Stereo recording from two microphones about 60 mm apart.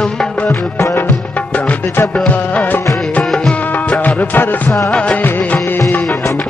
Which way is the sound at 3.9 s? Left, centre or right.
Left.